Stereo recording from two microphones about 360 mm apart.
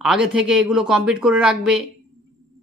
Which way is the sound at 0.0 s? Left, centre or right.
Centre.